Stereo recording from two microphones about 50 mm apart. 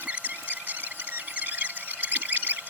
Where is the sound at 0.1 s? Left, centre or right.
Right.